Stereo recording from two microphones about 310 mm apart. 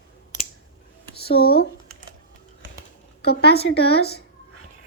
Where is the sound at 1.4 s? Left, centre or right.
Left.